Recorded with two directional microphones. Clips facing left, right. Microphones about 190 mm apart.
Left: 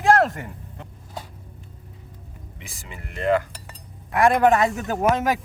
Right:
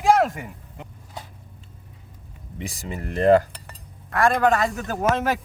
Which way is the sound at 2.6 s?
40° right (ahead or behind).